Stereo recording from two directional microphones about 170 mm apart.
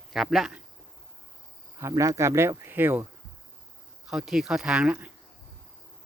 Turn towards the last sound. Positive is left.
turn(degrees=-5)  # may be behind; listen again after turning